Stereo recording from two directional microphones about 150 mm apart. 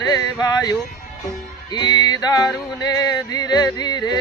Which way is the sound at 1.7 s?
25° left (ahead or behind).